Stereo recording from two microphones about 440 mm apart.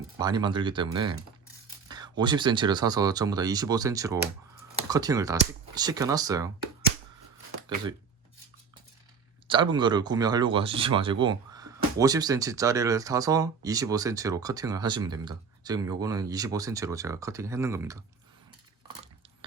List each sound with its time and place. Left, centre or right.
0.2 s speech: centre
9.5 s speech: centre